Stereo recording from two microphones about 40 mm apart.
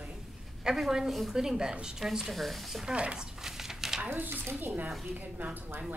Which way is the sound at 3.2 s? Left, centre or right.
Centre.